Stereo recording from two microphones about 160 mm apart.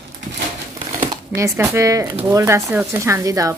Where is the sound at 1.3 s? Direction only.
15° right (ahead or behind).